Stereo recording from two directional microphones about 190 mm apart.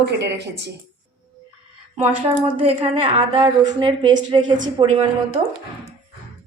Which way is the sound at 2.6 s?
25° right (ahead or behind).